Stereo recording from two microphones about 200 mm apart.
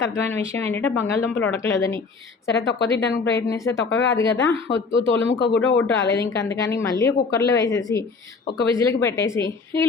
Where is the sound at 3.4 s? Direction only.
15° left (ahead or behind).